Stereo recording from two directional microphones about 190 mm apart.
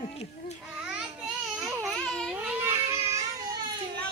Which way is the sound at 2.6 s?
10° right (ahead or behind).